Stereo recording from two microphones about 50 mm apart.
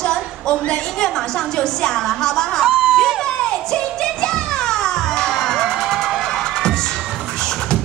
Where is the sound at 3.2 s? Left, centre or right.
Centre.